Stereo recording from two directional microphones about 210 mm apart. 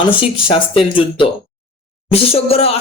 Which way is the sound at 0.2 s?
25° left (ahead or behind).